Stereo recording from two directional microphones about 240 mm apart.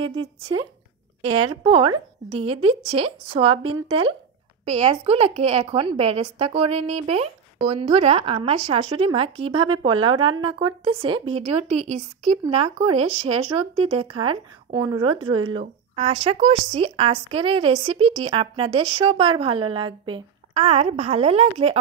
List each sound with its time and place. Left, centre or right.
0.0 s a woman's voice: right